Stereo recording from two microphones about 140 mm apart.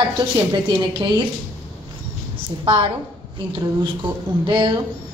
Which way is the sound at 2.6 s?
40° right (ahead or behind).